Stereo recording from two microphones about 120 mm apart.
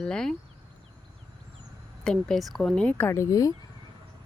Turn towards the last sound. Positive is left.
turn(degrees=30)  # may be behind; listen again after turning